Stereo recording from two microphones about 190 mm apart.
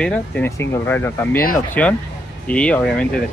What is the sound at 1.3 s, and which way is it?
Speech, 50° left (ahead or behind).